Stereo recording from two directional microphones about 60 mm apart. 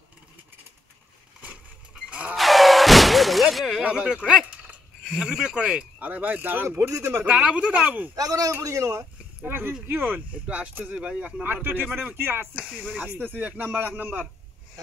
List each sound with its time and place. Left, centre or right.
2.0 s a sound: right
2.3 s a sound: centre
4.2 s speech: centre
5.1 s speech: centre
5.9 s speech: right
7.2 s speech: right
8.2 s a man's voice: right
8.6 s speech: right
9.5 s speech: right
10.4 s speech: centre
11.4 s speech: right
13.2 s speech: right